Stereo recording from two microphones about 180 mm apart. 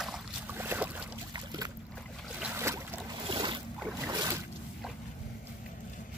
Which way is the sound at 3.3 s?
25° right (ahead or behind).